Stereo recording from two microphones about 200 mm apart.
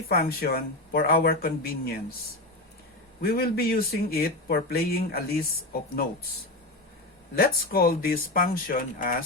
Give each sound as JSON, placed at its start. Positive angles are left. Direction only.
{"t": 0.1, "sound": "speech", "side_deg": 50}
{"t": 3.2, "sound": "speech", "side_deg": 50}
{"t": 7.3, "sound": "speech", "side_deg": 50}